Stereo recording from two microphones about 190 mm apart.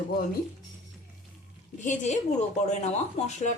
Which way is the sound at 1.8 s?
40° left (ahead or behind).